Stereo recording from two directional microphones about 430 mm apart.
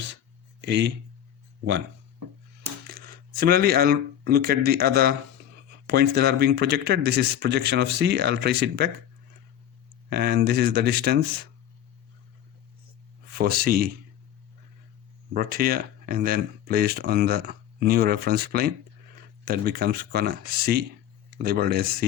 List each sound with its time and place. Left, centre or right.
0.6 s speech: right
2.8 s speech: right
10.1 s speech: right
13.3 s speech: right
15.3 s speech: right